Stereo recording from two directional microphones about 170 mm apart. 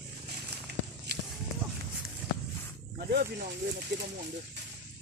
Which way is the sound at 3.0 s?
65° right (ahead or behind).